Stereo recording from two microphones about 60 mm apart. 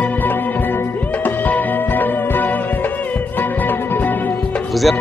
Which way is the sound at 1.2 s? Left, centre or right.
Left.